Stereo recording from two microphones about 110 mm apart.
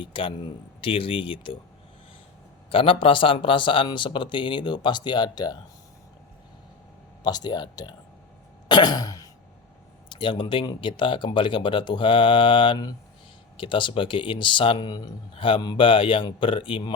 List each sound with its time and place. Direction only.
0.0 s speech: 50° left (ahead or behind)
2.6 s speech: 55° left (ahead or behind); by 5.5 s 40° left (ahead or behind)
7.3 s speech: 40° left (ahead or behind)
8.7 s throat clearing: 40° left (ahead or behind)
10.1 s speech: 50° left (ahead or behind)